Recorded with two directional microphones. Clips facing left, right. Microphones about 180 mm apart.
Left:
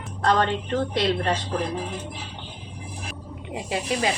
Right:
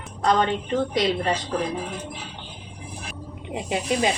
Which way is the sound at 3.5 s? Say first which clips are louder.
Right 2 dB; 20° right (ahead or behind).